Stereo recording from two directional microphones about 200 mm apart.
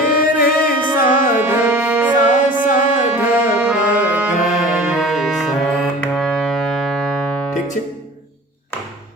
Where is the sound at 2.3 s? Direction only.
40° left (ahead or behind).